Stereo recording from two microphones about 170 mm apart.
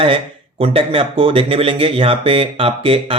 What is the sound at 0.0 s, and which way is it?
Speech, 30° right (ahead or behind).